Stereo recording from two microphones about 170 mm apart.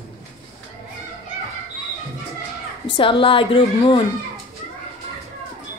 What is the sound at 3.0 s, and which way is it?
A woman's voice, 30° left (ahead or behind).